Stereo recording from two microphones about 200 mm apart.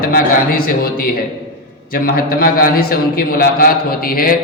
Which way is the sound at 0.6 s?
50° left (ahead or behind).